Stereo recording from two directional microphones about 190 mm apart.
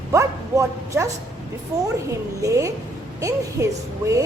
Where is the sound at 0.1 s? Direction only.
15° right (ahead or behind).